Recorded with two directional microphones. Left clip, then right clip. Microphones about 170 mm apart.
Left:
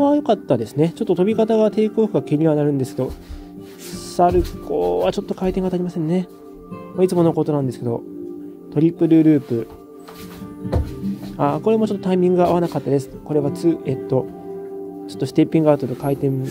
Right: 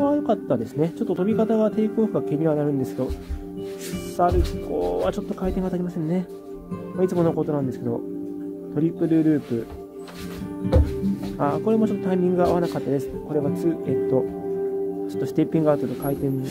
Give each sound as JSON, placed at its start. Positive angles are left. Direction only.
{"t": 0.0, "sound": "speech", "side_deg": 20}
{"t": 4.2, "sound": "a man's voice", "side_deg": 20}
{"t": 11.3, "sound": "a man's voice", "side_deg": 15}